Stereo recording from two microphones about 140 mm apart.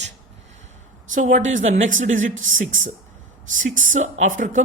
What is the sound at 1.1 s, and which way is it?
Speech, 65° right (ahead or behind).